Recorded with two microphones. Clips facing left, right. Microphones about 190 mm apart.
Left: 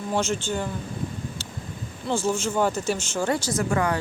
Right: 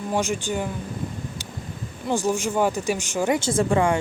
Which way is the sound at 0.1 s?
15° right (ahead or behind).